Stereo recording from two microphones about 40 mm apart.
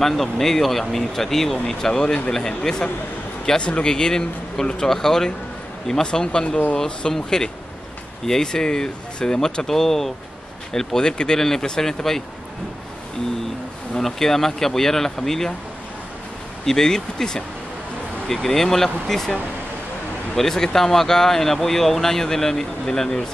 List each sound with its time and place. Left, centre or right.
0.0 s speech: centre
13.9 s speech: centre
16.6 s speech: centre
20.3 s speech: centre